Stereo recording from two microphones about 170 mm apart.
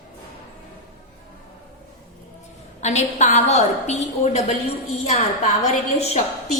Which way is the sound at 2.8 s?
40° left (ahead or behind).